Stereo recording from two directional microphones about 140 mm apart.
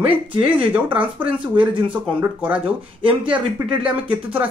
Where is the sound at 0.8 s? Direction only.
10° right (ahead or behind).